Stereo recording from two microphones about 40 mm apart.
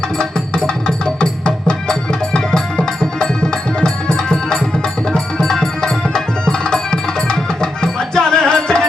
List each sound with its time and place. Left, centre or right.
0.2 s music: centre